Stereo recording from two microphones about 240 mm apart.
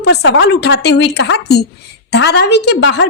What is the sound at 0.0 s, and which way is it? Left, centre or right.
A woman's voice, left.